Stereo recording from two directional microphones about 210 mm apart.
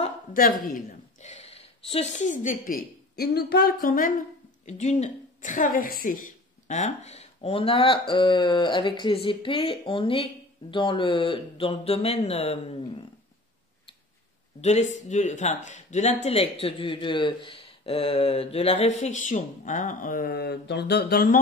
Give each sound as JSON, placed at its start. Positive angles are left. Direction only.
{"t": 0.0, "sound": "a woman's voice", "side_deg": 40}
{"t": 14.6, "sound": "speech", "side_deg": 35}